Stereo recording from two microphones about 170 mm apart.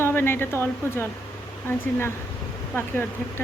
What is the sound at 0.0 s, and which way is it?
Speech, 15° left (ahead or behind).